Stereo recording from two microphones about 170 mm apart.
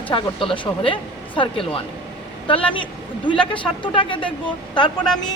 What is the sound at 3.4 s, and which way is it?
Speech, 30° left (ahead or behind).